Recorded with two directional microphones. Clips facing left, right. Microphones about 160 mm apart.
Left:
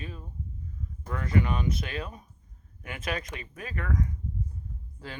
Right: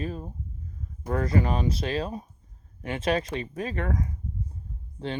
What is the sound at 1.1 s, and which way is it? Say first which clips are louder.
Speech: right 3 dB; 35° right (ahead or behind).